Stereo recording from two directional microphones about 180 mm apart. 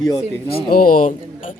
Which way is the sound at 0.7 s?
50° left (ahead or behind).